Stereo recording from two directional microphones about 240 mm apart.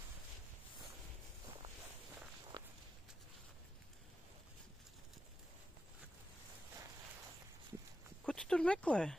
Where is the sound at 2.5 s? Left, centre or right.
Centre.